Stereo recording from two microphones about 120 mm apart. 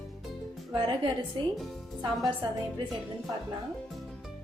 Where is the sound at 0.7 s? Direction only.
35° right (ahead or behind).